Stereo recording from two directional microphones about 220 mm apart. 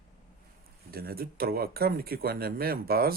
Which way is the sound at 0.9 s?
45° right (ahead or behind).